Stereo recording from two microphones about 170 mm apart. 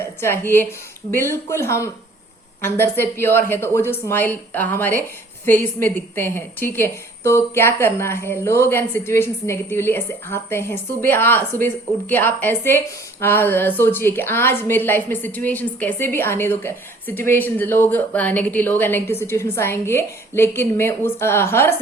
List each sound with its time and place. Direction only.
0.0 s a woman's voice: 15° left (ahead or behind)